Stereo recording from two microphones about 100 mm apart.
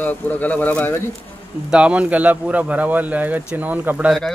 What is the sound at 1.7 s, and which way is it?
Speech, 10° right (ahead or behind).